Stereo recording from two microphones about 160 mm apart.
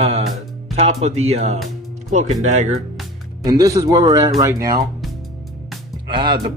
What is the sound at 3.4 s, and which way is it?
Speech, 20° right (ahead or behind).